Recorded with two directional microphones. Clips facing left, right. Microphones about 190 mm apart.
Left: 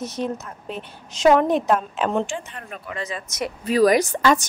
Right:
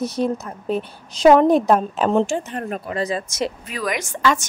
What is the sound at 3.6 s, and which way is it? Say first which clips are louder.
Speech: left 10 dB; 35° left (ahead or behind).